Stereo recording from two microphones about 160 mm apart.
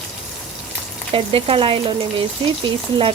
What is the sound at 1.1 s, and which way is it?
A woman's voice, 35° right (ahead or behind).